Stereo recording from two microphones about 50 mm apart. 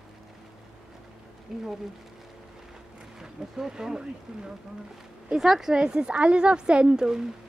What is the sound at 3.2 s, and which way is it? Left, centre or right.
A woman's voice, centre.